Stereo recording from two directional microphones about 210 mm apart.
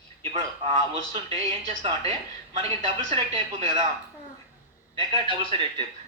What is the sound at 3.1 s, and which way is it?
Speech, 30° right (ahead or behind).